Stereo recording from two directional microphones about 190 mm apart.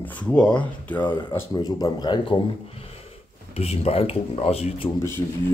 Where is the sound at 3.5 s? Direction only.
30° left (ahead or behind).